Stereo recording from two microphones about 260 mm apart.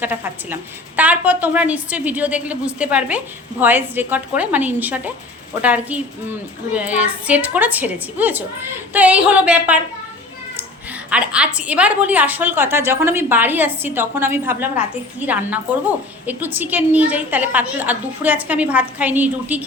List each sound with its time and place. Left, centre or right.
0.0 s a woman's voice: centre
11.1 s a woman's voice: centre